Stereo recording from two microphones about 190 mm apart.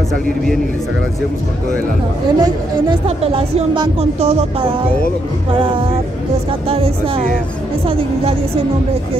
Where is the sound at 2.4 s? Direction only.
30° right (ahead or behind).